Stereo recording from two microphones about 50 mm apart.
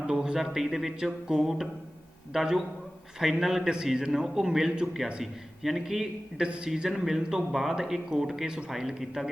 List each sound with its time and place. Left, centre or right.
0.1 s a sound: centre
0.3 s a man's voice: centre
6.3 s a man's voice: centre